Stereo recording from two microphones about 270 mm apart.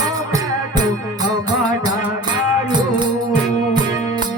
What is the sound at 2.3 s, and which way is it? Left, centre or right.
Music, centre.